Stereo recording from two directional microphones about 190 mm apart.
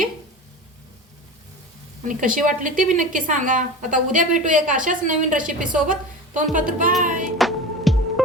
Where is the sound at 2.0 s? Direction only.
45° right (ahead or behind).